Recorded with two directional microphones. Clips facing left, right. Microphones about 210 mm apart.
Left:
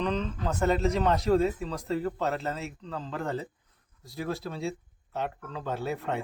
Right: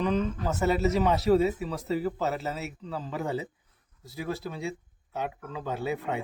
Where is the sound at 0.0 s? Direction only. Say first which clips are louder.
Right 2 dB; 5° right (ahead or behind).